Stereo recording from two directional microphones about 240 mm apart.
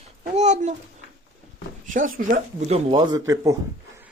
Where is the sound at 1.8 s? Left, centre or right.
Right.